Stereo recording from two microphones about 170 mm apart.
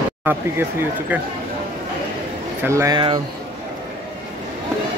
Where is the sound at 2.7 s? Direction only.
15° right (ahead or behind).